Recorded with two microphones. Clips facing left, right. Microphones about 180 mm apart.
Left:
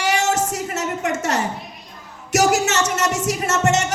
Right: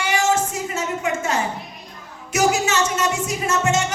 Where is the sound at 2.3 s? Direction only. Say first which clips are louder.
Left 2 dB; 75° left (ahead or behind).